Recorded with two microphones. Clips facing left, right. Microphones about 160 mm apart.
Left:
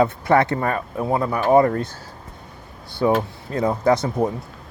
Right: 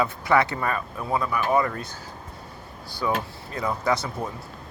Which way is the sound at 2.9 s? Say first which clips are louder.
Left 8 dB; 25° left (ahead or behind).